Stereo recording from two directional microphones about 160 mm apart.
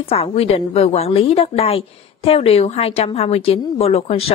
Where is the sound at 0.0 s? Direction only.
35° left (ahead or behind).